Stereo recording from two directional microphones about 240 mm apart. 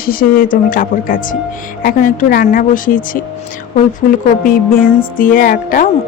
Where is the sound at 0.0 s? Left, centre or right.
Left.